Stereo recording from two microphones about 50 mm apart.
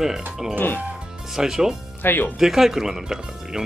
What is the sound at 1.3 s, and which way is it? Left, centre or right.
Speech, centre.